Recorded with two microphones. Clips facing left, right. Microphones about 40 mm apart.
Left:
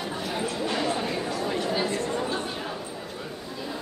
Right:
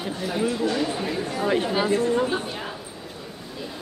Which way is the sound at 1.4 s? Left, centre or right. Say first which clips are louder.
Right 7 dB; right.